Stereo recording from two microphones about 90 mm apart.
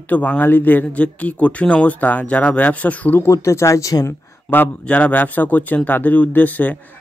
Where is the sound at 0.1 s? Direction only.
20° left (ahead or behind).